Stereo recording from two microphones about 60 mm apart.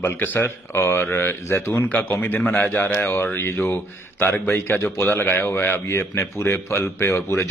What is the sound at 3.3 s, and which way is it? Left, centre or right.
A man's voice, left.